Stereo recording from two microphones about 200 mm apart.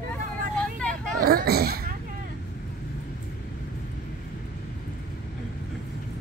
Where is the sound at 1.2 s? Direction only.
50° right (ahead or behind).